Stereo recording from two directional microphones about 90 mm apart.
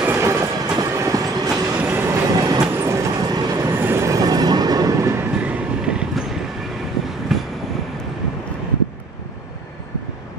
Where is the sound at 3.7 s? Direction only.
25° right (ahead or behind); by 5.1 s 45° right (ahead or behind).